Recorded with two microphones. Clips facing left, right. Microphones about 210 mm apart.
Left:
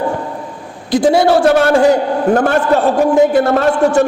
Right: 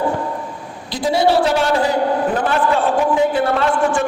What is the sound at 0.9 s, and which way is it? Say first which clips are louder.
A man's voice: left 6 dB; 50° left (ahead or behind).